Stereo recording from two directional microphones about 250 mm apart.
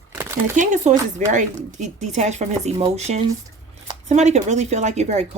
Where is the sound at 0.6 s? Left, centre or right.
Right.